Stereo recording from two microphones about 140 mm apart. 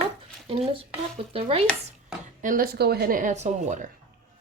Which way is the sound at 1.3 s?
45° right (ahead or behind).